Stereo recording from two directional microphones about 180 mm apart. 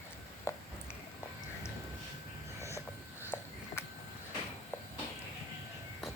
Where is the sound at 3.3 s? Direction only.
20° left (ahead or behind).